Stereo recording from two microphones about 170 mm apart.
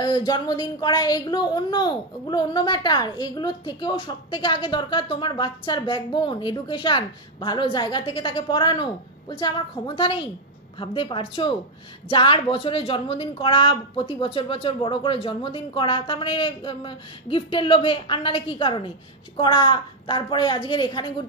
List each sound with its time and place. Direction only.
0.0 s speech: 25° left (ahead or behind)